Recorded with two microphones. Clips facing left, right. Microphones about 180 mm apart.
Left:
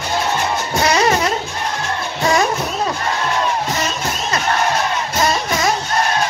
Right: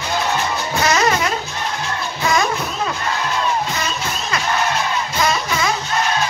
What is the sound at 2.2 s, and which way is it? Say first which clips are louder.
Music: left 3 dB; 35° left (ahead or behind).